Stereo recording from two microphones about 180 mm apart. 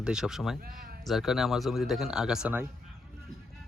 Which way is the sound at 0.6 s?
55° right (ahead or behind).